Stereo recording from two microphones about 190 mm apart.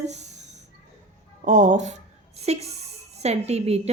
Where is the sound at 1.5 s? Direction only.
40° right (ahead or behind).